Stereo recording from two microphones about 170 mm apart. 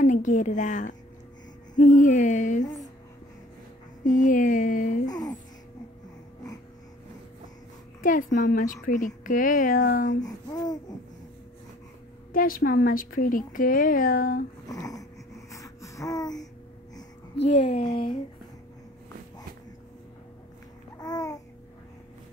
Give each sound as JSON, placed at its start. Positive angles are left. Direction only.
{"t": 0.0, "sound": "a woman's voice", "side_deg": 50}
{"t": 4.0, "sound": "a sound", "side_deg": 50}
{"t": 5.0, "sound": "music", "side_deg": 20}
{"t": 8.0, "sound": "speech", "side_deg": 50}
{"t": 10.2, "sound": "speech", "side_deg": 20}
{"t": 12.3, "sound": "a woman's voice", "side_deg": 55}
{"t": 14.7, "sound": "wheeze", "side_deg": 20}
{"t": 15.5, "sound": "a sound", "side_deg": 20}
{"t": 17.5, "sound": "speech", "side_deg": 45}
{"t": 21.0, "sound": "babbling", "side_deg": 20}